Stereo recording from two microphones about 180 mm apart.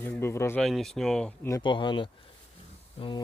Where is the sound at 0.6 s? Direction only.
Centre (ahead or behind).